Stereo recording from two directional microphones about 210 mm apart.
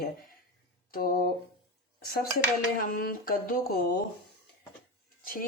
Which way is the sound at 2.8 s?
45° left (ahead or behind).